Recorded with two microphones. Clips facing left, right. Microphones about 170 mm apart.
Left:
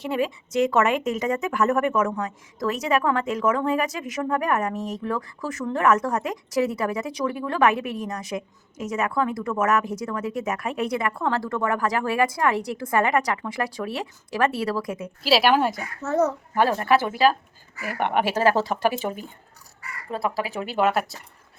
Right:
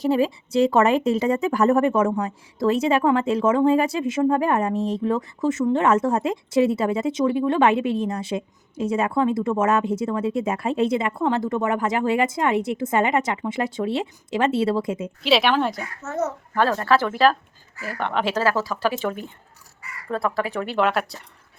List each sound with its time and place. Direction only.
0.0 s a woman's voice: 35° right (ahead or behind)
15.2 s a woman's voice: 5° left (ahead or behind)
16.6 s speech: 20° left (ahead or behind)
18.5 s speech: 30° left (ahead or behind)
20.2 s speech: 20° left (ahead or behind)